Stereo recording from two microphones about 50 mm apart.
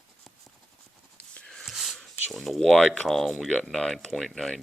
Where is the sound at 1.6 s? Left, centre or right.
Centre.